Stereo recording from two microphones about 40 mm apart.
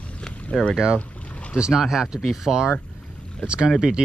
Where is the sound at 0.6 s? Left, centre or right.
Centre.